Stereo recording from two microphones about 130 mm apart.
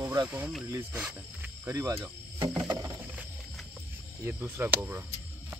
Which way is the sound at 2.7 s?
25° right (ahead or behind).